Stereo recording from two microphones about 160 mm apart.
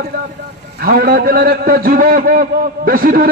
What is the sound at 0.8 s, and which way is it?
A man's voice, 65° right (ahead or behind).